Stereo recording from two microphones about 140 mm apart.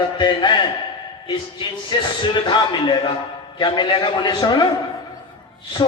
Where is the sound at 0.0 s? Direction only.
35° left (ahead or behind).